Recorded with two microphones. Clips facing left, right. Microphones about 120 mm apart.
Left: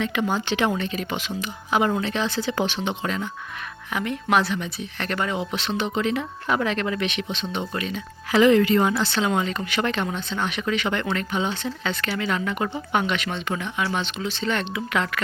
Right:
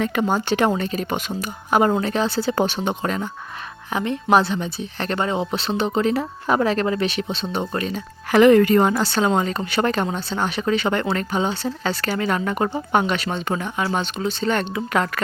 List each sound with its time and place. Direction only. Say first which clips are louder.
0.0 s a woman's voice: right 3 dB; 45° right (ahead or behind)
3.9 s a woman's voice: right 4 dB; 30° right (ahead or behind)
8.4 s a woman's voice: right 4 dB; 50° right (ahead or behind)